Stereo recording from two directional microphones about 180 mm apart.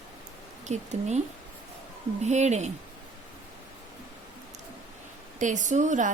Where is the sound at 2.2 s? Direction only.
40° right (ahead or behind).